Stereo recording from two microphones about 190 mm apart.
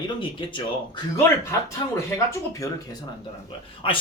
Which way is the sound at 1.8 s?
15° left (ahead or behind).